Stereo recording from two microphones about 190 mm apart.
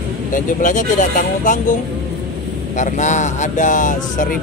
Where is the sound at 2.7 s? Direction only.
40° left (ahead or behind).